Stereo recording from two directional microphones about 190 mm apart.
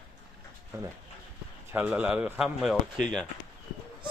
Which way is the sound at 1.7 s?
10° right (ahead or behind).